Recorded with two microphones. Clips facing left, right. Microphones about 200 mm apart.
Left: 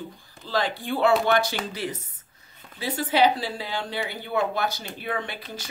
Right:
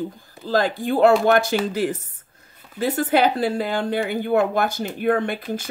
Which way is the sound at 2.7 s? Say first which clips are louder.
Right 4 dB; 50° right (ahead or behind).